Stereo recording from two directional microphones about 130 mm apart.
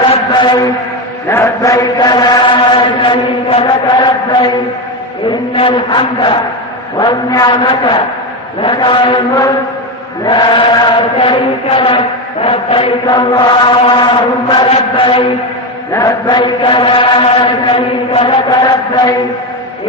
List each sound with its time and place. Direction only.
0.4 s chant: 30° left (ahead or behind)
5.7 s chant: 40° left (ahead or behind)
10.2 s chant: 35° left (ahead or behind)
15.9 s chant: 25° left (ahead or behind); by 18.3 s 45° left (ahead or behind)
18.4 s chant: 35° left (ahead or behind)